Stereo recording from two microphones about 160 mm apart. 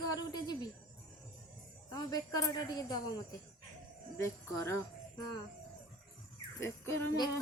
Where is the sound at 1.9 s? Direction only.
25° left (ahead or behind).